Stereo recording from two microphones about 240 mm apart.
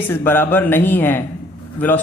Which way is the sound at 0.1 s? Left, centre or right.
Centre.